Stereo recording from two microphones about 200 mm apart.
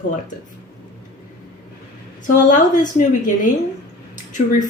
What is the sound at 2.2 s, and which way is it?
A woman's voice, 40° left (ahead or behind).